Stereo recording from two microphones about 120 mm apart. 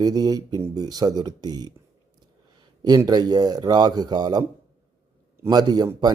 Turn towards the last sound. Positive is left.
turn(degrees=-35)  # may be behind; listen again after turning